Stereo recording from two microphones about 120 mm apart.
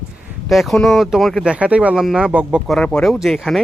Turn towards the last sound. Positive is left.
turn(degrees=0)  # may be behind; listen again after turning